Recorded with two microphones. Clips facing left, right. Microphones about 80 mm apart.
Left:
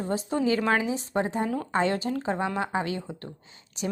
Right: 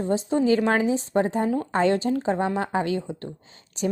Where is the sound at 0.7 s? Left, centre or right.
Right.